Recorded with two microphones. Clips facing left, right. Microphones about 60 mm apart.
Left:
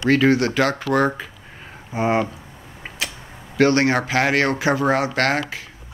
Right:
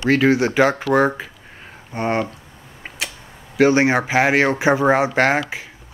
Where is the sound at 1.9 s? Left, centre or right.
Centre.